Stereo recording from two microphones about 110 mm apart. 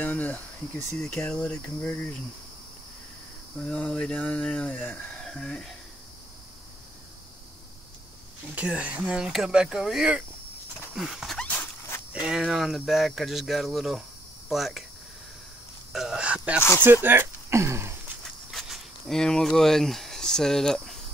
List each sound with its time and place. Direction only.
0.0 s speech: 15° left (ahead or behind)
3.5 s speech: 5° left (ahead or behind)
5.2 s speech: 5° left (ahead or behind)
8.5 s speech: 10° right (ahead or behind)
15.9 s speech: 5° right (ahead or behind)
16.8 s a sound: 20° right (ahead or behind)
18.5 s speech: centre (ahead or behind)